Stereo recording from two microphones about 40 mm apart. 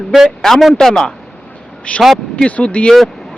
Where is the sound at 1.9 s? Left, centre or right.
Left.